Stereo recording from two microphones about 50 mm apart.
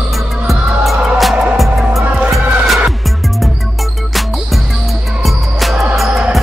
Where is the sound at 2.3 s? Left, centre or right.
Centre.